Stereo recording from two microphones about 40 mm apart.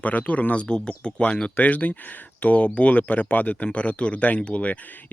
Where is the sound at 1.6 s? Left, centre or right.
Left.